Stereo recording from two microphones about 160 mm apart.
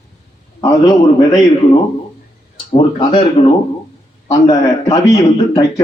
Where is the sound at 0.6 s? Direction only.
25° left (ahead or behind).